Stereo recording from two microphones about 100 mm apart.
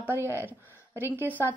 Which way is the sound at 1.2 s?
15° left (ahead or behind).